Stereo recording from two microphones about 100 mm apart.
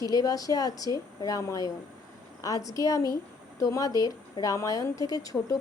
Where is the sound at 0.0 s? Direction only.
40° left (ahead or behind).